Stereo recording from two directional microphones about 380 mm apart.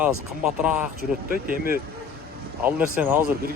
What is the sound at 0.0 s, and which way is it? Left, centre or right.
Speech, centre.